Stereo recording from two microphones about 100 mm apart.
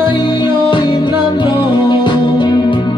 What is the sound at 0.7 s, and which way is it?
Music, 50° left (ahead or behind).